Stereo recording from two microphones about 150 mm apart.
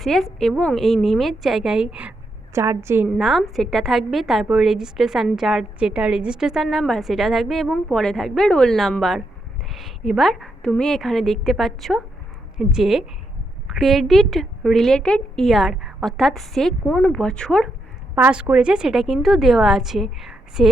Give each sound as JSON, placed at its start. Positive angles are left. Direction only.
{"t": 0.0, "sound": "a woman's voice", "side_deg": 0}
{"t": 3.2, "sound": "a woman's voice", "side_deg": 0}
{"t": 18.1, "sound": "a woman's voice", "side_deg": -10}